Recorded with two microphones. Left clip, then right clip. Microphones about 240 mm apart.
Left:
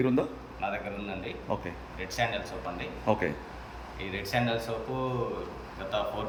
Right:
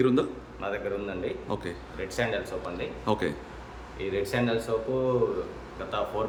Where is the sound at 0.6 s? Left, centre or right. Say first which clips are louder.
Even; centre.